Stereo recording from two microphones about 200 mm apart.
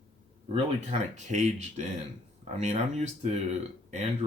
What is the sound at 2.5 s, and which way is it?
Speech, 35° right (ahead or behind).